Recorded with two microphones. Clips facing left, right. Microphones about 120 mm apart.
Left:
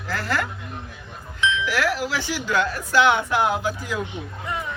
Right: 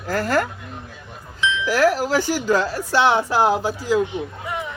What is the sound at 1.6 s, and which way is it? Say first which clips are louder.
Speech: right 6 dB; 40° right (ahead or behind).